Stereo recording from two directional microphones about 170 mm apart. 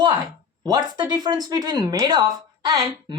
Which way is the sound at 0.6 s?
25° right (ahead or behind).